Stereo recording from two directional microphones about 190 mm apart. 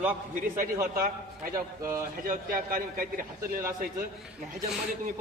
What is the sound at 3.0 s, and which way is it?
Speech, 50° right (ahead or behind).